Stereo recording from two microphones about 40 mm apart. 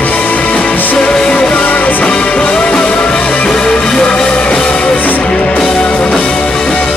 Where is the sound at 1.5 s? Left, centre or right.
Left.